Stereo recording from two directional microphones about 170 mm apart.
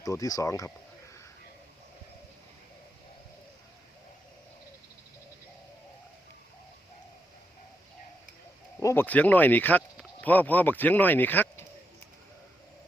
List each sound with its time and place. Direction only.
0.0 s speech: 20° left (ahead or behind)
8.8 s speech: 15° left (ahead or behind)